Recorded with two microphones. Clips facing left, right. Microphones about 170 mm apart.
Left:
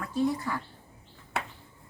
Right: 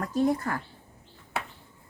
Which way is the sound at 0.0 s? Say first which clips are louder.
Right 3 dB; 45° right (ahead or behind).